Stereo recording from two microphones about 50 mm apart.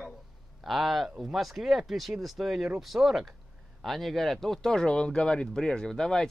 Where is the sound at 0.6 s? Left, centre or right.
Centre.